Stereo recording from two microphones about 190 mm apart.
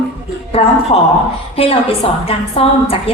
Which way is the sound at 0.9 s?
30° left (ahead or behind).